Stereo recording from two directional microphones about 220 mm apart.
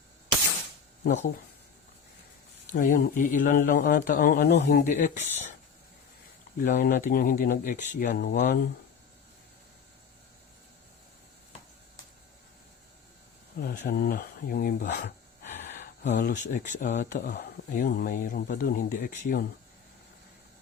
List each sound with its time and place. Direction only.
1.0 s speech: 35° left (ahead or behind)
2.7 s speech: 35° left (ahead or behind)
4.8 s speech: 35° left (ahead or behind)
6.6 s speech: 40° left (ahead or behind)
13.6 s speech: 45° left (ahead or behind)